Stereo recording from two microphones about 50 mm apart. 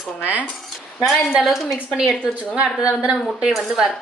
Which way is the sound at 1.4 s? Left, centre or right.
Centre.